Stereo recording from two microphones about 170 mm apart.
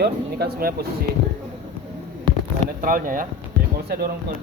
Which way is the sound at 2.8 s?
55° right (ahead or behind).